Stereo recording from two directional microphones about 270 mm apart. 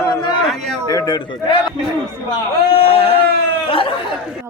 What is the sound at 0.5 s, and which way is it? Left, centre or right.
Speech, centre.